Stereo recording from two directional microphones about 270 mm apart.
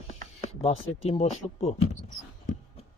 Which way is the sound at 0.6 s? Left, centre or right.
Left.